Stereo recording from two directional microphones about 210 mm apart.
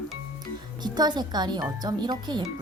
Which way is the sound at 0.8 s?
20° right (ahead or behind).